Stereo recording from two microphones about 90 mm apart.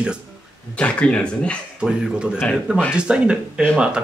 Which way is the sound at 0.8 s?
15° left (ahead or behind).